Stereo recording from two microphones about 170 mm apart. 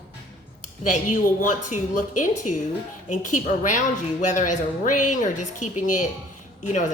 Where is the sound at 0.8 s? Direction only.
50° left (ahead or behind).